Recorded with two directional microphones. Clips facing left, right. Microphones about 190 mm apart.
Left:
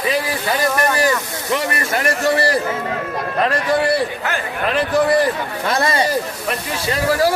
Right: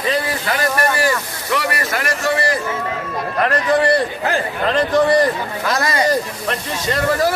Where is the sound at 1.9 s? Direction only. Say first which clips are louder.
Left 5 dB; 30° left (ahead or behind).